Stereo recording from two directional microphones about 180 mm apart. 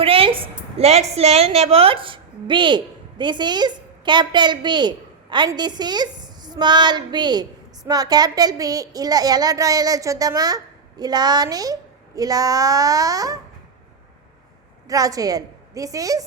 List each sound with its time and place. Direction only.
0.0 s a sound: 30° right (ahead or behind)
1.1 s a woman's voice: 35° right (ahead or behind); by 13.4 s 20° right (ahead or behind)
14.8 s a woman's voice: 20° right (ahead or behind)